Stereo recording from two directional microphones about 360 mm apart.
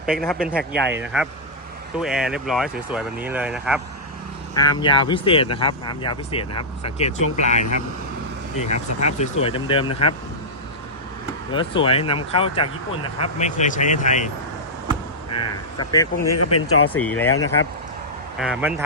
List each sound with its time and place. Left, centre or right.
0.0 s speech: centre
4.5 s speech: centre
8.7 s speech: left
9.1 s speech: centre
11.5 s speech: centre
15.4 s speech: centre
16.3 s speech: left
16.9 s speech: centre
18.3 s speech: centre